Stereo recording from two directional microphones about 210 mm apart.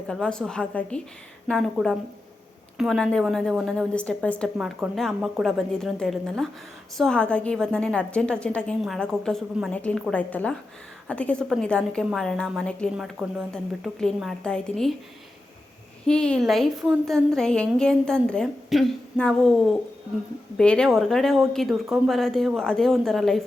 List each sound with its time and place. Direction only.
0.1 s a woman's voice: 5° left (ahead or behind)
16.0 s a woman's voice: 5° left (ahead or behind)